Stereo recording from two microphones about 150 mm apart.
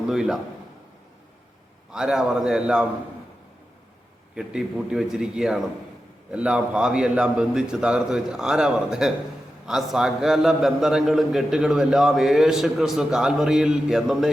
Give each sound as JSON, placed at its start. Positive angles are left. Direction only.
{"t": 0.1, "sound": "a man's voice", "side_deg": -5}
{"t": 1.9, "sound": "a man's voice", "side_deg": -5}
{"t": 4.4, "sound": "a man's voice", "side_deg": -5}